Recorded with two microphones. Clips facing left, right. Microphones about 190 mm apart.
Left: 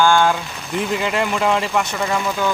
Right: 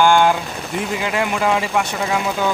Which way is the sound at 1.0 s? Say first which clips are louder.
Right 2 dB; 5° right (ahead or behind).